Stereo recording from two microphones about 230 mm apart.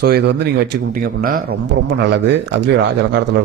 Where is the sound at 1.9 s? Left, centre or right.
Right.